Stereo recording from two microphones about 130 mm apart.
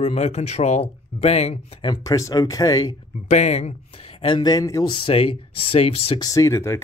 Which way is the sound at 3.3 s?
60° left (ahead or behind).